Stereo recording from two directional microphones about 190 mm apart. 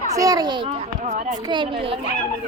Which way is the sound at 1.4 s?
25° right (ahead or behind).